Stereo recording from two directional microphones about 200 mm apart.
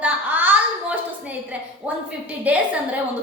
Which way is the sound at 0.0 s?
10° right (ahead or behind).